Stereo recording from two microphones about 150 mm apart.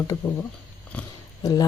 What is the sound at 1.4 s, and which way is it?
Speech, 25° left (ahead or behind).